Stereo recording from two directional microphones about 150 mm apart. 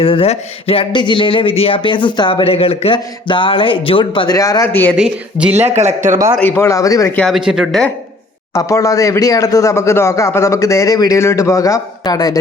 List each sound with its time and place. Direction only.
0.0 s speech: 40° left (ahead or behind)
4.4 s speech: 20° left (ahead or behind)
4.9 s speech: 5° right (ahead or behind)
5.5 s a man's voice: 45° right (ahead or behind)
6.4 s speech: 20° left (ahead or behind)
7.2 s speech: centre (ahead or behind)
8.5 s speech: 20° left (ahead or behind)